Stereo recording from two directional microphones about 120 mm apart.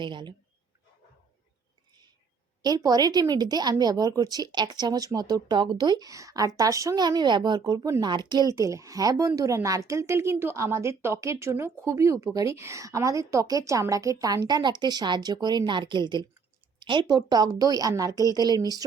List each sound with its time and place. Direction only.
0.0 s a woman's voice: 40° right (ahead or behind)
2.6 s a woman's voice: 35° right (ahead or behind)
8.0 s a woman's voice: 40° right (ahead or behind)